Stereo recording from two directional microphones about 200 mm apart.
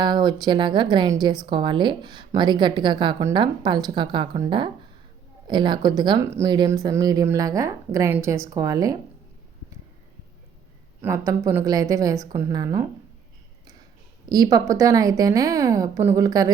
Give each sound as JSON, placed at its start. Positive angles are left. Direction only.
{"t": 0.0, "sound": "a woman's voice", "side_deg": -20}
{"t": 11.0, "sound": "speech", "side_deg": -15}
{"t": 14.3, "sound": "speech", "side_deg": -20}